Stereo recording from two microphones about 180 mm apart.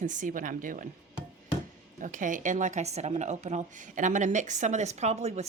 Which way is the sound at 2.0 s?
45° right (ahead or behind).